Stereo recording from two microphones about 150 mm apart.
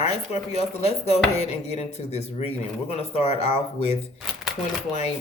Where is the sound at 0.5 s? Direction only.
45° left (ahead or behind).